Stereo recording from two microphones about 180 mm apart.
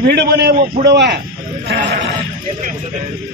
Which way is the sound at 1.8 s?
45° right (ahead or behind).